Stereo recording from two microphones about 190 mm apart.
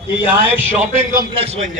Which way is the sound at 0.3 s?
10° right (ahead or behind).